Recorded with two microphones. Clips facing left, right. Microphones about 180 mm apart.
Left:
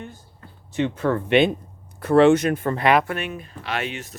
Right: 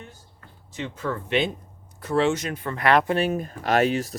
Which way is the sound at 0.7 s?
60° left (ahead or behind).